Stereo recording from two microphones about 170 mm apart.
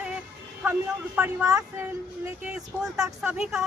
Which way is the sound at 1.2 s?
10° right (ahead or behind).